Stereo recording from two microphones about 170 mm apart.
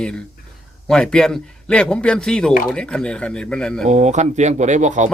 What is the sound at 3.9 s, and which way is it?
Speech, 45° right (ahead or behind).